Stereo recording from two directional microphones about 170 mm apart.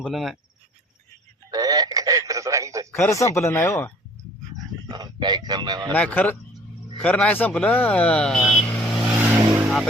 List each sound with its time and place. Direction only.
0.0 s cricket: centre (ahead or behind)
1.5 s telephone: 20° right (ahead or behind)
2.9 s speech: 15° left (ahead or behind)
4.9 s a man's voice: 25° right (ahead or behind)
5.9 s speech: 10° left (ahead or behind)
9.0 s vehicle: 10° right (ahead or behind)